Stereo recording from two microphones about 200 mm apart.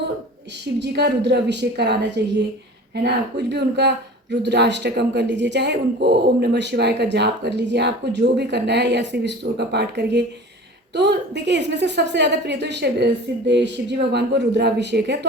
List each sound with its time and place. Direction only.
0.8 s speech: 55° right (ahead or behind)